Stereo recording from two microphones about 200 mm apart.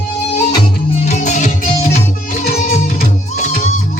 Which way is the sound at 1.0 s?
35° left (ahead or behind).